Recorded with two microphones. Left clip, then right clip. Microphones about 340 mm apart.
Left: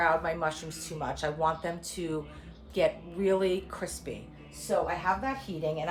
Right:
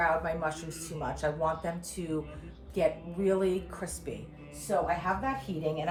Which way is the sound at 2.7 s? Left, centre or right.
Centre.